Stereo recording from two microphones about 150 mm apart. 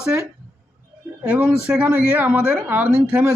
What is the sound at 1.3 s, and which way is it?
Speech, 10° right (ahead or behind).